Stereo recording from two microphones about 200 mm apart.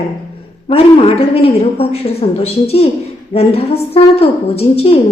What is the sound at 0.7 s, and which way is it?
A woman's voice, 30° left (ahead or behind).